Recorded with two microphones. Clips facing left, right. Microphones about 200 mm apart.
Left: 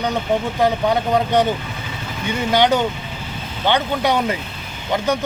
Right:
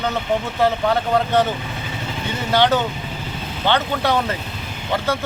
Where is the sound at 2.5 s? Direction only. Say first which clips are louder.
Left 1 dB; 15° left (ahead or behind).